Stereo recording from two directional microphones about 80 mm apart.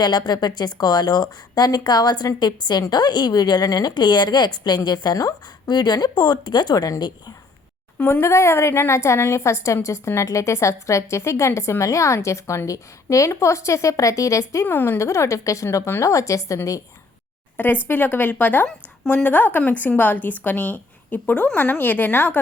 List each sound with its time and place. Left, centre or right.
0.0 s a woman's voice: left
3.9 s a woman's voice: left
8.0 s a woman's voice: left
14.7 s a woman's voice: left
17.8 s a woman's voice: left